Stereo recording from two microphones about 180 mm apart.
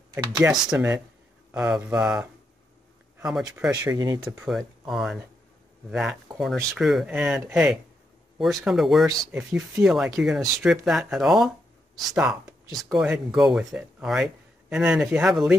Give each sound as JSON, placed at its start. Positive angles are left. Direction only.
{"t": 0.1, "sound": "speech", "side_deg": -20}
{"t": 0.4, "sound": "speech", "side_deg": -5}
{"t": 3.7, "sound": "speech", "side_deg": -20}
{"t": 4.5, "sound": "speech", "side_deg": 0}